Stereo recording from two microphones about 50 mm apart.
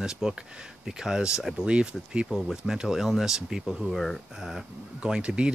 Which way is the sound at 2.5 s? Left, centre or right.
Centre.